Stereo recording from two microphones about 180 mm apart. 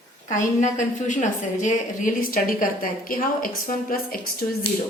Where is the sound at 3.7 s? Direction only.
50° left (ahead or behind).